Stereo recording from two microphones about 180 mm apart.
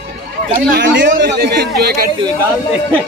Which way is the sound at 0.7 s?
80° right.